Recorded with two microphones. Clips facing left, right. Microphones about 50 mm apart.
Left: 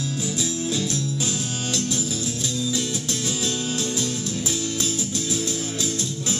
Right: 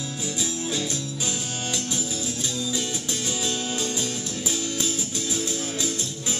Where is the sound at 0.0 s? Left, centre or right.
Centre.